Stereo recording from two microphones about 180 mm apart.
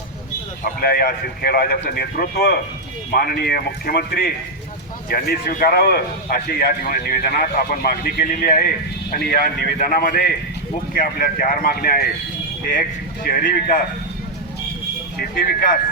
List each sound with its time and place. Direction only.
0.6 s a man's voice: 60° left (ahead or behind)
7.4 s a man's voice: 45° left (ahead or behind)
15.2 s a man's voice: 55° left (ahead or behind)